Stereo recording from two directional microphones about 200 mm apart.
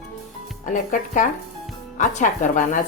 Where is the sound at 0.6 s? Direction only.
40° left (ahead or behind).